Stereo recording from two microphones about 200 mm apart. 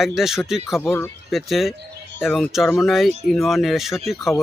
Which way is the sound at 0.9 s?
10° left (ahead or behind).